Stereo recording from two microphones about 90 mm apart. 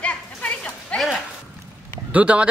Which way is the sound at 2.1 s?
15° right (ahead or behind).